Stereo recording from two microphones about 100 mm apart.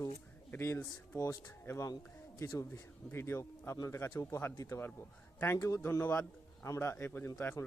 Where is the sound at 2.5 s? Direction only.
35° left (ahead or behind).